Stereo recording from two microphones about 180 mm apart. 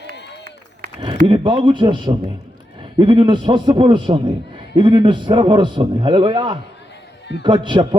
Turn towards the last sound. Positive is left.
turn(degrees=-25)  # may be behind; listen again after turning